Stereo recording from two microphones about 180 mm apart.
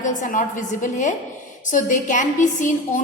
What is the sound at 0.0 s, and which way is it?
A woman's voice, 45° left (ahead or behind).